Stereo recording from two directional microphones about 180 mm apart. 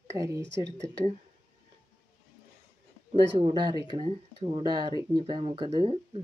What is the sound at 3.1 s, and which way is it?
Speech, 30° right (ahead or behind).